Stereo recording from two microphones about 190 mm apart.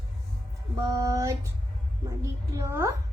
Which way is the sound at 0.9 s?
15° right (ahead or behind).